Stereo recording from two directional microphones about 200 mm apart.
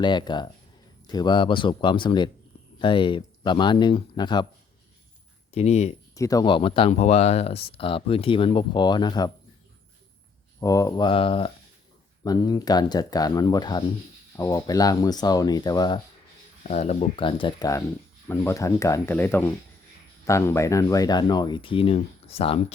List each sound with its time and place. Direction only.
0.0 s speech: 20° left (ahead or behind)
5.5 s speech: 30° left (ahead or behind)
6.1 s speech: 15° left (ahead or behind)
10.6 s speech: 15° left (ahead or behind)
16.6 s speech: 35° left (ahead or behind)